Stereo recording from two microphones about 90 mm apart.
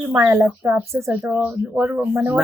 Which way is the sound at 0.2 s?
30° right (ahead or behind).